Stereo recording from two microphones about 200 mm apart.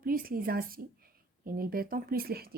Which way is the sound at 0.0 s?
45° right (ahead or behind).